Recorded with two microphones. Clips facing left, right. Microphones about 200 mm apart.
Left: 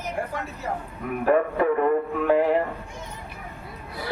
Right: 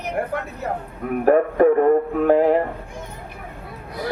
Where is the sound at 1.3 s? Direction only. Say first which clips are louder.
Right 6 dB; 45° right (ahead or behind).